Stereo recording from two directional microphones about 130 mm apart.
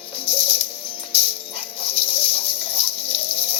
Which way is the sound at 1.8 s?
45° left (ahead or behind).